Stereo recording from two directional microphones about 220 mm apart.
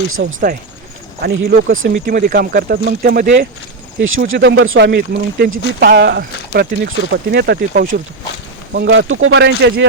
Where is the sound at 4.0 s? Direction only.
65° right (ahead or behind); by 7.9 s 40° right (ahead or behind).